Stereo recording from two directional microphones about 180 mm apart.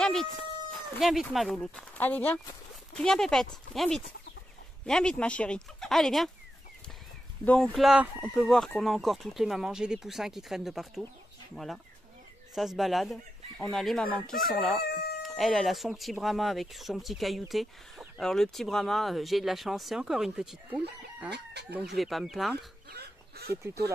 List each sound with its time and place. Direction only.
0.0 s a sound: centre (ahead or behind)
0.9 s speech: centre (ahead or behind)
7.4 s speech: 5° left (ahead or behind)
21.3 s speech: 65° right (ahead or behind)
21.7 s speech: centre (ahead or behind)
22.9 s fowl: 60° right (ahead or behind)
23.5 s speech: 15° right (ahead or behind)